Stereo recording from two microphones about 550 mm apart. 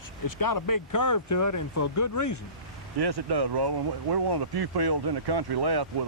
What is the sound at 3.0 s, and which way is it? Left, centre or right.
Speech, right.